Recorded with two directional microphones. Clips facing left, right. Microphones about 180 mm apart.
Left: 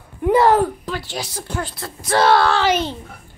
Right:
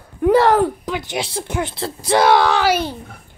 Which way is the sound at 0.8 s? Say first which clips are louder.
Right 3 dB; 20° right (ahead or behind).